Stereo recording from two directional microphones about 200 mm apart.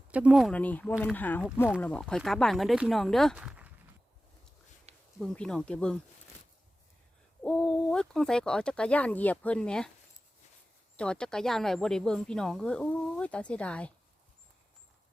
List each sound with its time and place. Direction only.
0.1 s speech: 5° right (ahead or behind)
4.9 s a sound: 30° right (ahead or behind)
5.2 s speech: 5° left (ahead or behind)
7.4 s speech: 5° left (ahead or behind)
10.9 s speech: 5° left (ahead or behind)